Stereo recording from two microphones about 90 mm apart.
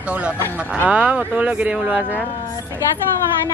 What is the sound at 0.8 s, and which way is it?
Speech, 10° right (ahead or behind).